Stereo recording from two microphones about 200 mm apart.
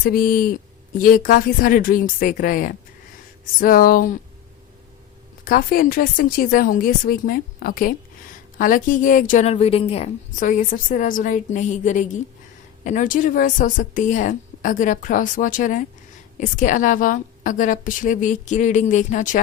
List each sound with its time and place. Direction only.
0.0 s a woman's voice: 45° left (ahead or behind)
5.5 s a woman's voice: 45° left (ahead or behind)